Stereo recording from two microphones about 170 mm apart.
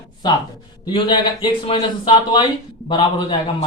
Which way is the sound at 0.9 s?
30° left (ahead or behind).